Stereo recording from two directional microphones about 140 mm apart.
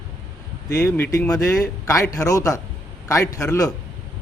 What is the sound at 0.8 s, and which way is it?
Speech, 15° left (ahead or behind).